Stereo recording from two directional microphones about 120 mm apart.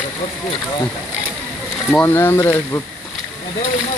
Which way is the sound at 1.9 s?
20° left (ahead or behind).